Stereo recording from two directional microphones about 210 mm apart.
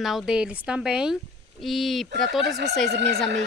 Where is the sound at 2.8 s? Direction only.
50° right (ahead or behind).